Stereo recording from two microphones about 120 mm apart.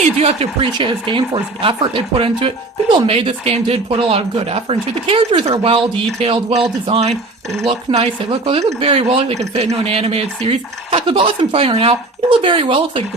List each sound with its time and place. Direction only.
0.0 s speech: 60° right (ahead or behind)
0.7 s speech: 40° right (ahead or behind)